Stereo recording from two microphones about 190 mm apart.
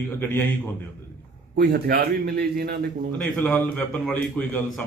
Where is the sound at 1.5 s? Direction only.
55° right (ahead or behind).